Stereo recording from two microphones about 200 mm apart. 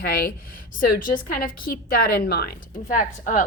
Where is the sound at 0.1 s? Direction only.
50° left (ahead or behind).